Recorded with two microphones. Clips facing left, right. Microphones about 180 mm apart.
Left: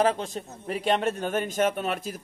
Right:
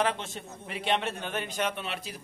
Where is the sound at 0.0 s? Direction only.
40° left (ahead or behind).